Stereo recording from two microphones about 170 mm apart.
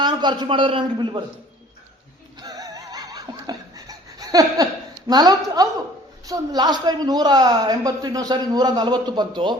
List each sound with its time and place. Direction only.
0.0 s a woman's voice: 25° right (ahead or behind)
2.4 s laughter: 20° right (ahead or behind)
5.0 s a woman's voice: 25° right (ahead or behind)